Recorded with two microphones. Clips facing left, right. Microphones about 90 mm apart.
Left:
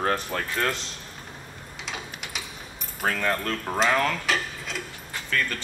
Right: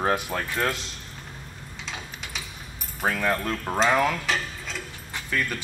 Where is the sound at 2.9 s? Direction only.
5° right (ahead or behind).